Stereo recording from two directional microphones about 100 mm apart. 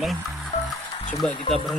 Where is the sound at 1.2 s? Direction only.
5° left (ahead or behind).